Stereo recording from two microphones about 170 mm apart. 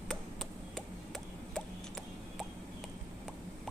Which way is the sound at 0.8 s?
5° left (ahead or behind).